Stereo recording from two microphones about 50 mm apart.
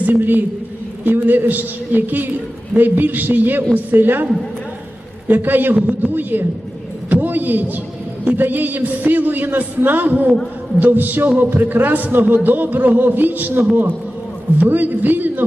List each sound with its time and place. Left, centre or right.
0.0 s a man's voice: right
5.3 s a man's voice: right
7.1 s a sound: right
8.4 s a man's voice: right